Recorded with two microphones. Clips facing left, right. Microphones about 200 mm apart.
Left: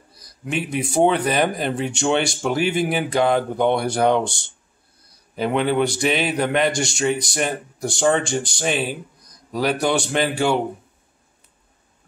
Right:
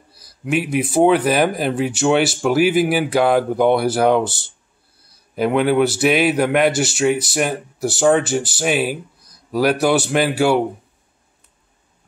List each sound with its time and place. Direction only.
0.1 s a man's voice: 5° right (ahead or behind)